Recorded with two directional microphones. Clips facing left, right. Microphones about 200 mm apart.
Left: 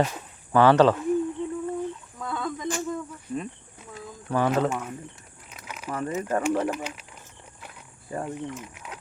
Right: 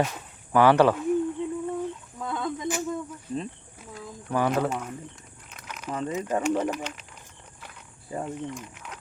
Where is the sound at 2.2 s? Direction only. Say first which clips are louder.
Right 1 dB; 20° right (ahead or behind).